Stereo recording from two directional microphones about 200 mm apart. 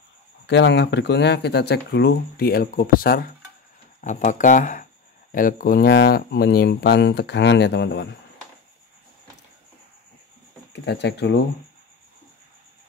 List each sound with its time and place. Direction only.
0.5 s speech: 60° left (ahead or behind)
10.7 s speech: 60° left (ahead or behind)